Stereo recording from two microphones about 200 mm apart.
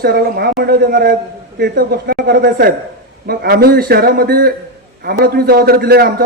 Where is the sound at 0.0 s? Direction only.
50° right (ahead or behind).